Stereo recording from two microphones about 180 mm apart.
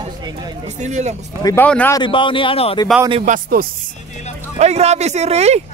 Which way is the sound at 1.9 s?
25° left (ahead or behind).